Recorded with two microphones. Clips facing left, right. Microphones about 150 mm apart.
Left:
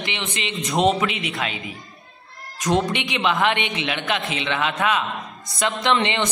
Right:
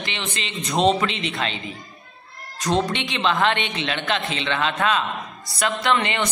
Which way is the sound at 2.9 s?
15° left (ahead or behind).